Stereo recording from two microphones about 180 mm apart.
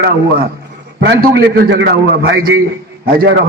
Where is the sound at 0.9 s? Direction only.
70° right (ahead or behind).